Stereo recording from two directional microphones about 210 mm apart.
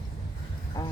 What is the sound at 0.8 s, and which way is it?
Speech, 20° left (ahead or behind).